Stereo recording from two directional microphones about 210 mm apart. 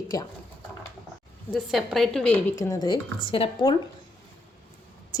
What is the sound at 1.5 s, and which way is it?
Speech, centre (ahead or behind).